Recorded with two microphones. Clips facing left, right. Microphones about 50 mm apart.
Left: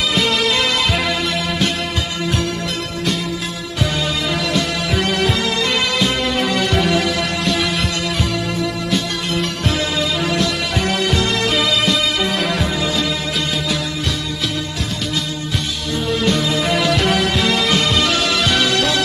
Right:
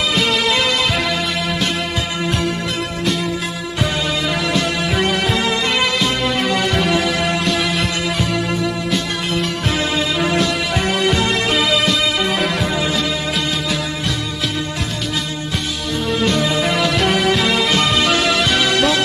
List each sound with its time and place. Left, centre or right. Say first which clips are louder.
0.1 s music: even; centre
5.4 s music: right 1 dB; centre
5.8 s music: right 1 dB; centre
11.5 s music: right 1 dB; centre
16.6 s music: even; centre
18.8 s music: right 2 dB; right